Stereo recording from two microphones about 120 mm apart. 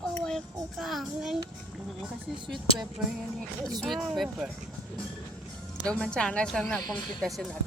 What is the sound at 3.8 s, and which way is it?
Speech, centre (ahead or behind).